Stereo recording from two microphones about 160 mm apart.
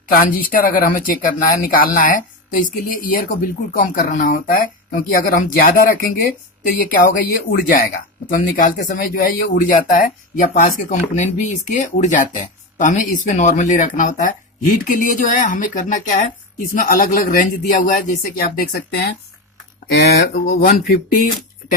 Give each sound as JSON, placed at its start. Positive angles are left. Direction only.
{"t": 0.1, "sound": "speech", "side_deg": 60}
{"t": 20.5, "sound": "speech", "side_deg": 60}